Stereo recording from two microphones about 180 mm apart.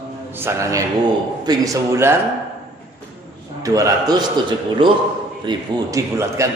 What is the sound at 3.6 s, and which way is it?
A man's voice, 20° right (ahead or behind).